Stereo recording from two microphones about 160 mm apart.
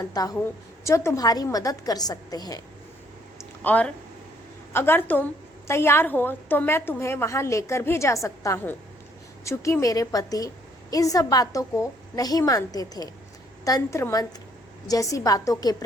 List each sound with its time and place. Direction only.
0.0 s a woman's voice: 25° left (ahead or behind)
3.6 s a woman's voice: 10° left (ahead or behind)